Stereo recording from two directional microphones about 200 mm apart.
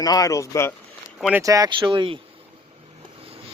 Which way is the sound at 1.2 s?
5° right (ahead or behind).